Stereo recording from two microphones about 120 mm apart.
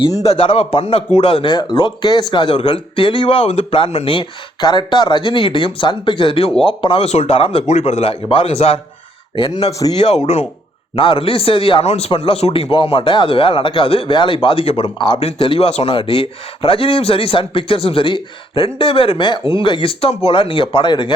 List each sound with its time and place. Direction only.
0.2 s a man's voice: 55° left (ahead or behind)
7.7 s a man's voice: 65° left (ahead or behind)
9.3 s speech: 45° left (ahead or behind)
10.9 s speech: 45° left (ahead or behind)